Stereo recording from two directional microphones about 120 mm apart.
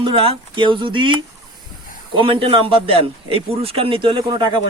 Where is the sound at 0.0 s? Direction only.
45° right (ahead or behind).